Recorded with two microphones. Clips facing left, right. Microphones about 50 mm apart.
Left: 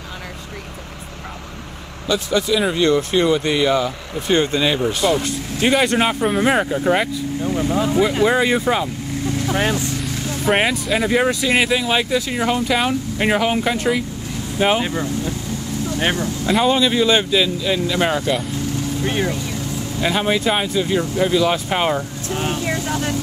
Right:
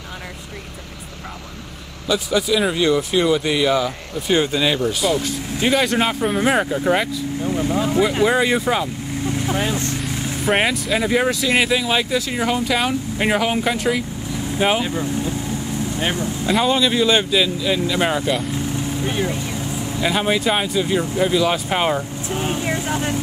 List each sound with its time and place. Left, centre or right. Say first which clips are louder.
2.0 s speech: even; centre
4.6 s speech: left 1 dB; centre
10.1 s vehicle: even; right
10.4 s speech: left 1 dB; centre
14.8 s speech: even; left
16.4 s speech: left 1 dB; centre
18.7 s vehicle: left 1 dB; right
19.0 s speech: left 2 dB; left
19.3 s vehicle: even; right
20.0 s speech: left 1 dB; centre
22.5 s speech: even; right